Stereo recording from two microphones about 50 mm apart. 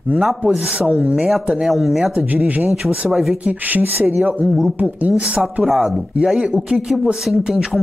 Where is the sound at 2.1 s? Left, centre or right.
Right.